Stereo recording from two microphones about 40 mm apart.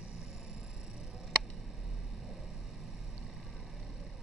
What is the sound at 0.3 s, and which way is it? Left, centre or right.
Vehicle, centre.